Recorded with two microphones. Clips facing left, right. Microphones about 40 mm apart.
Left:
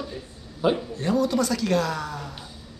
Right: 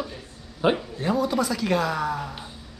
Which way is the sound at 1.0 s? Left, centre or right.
Centre.